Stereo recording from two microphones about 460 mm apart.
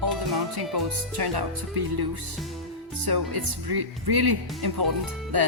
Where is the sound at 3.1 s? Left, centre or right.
Right.